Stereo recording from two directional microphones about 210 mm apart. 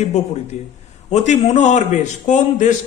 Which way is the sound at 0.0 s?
35° left (ahead or behind).